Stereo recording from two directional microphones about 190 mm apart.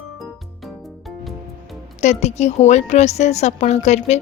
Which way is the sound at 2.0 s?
35° left (ahead or behind).